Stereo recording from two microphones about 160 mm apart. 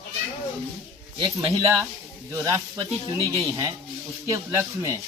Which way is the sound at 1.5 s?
20° right (ahead or behind).